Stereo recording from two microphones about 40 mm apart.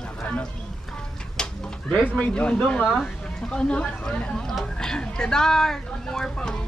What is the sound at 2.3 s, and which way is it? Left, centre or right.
Speech, left.